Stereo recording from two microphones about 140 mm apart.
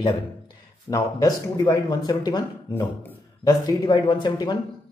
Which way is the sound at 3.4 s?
30° left (ahead or behind).